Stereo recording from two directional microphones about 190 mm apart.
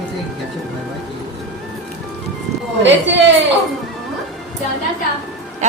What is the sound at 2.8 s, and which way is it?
Speech, 70° right (ahead or behind).